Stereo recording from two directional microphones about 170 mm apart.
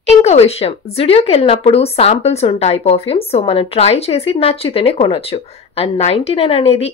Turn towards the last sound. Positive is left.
turn(degrees=35)  # may be behind; listen again after turning